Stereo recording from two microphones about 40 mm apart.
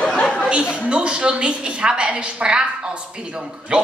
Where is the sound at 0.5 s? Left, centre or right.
Right.